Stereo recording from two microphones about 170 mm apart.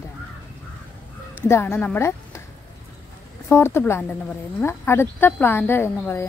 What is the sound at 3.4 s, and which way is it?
Speech, 15° left (ahead or behind).